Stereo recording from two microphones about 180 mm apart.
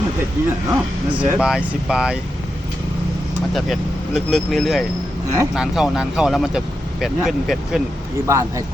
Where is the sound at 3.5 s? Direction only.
Centre (ahead or behind).